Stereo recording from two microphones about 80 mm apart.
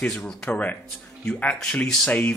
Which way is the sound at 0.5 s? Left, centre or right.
Centre.